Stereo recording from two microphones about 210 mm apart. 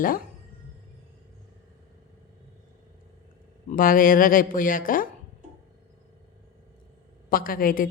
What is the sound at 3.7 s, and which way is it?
Speech, 40° left (ahead or behind).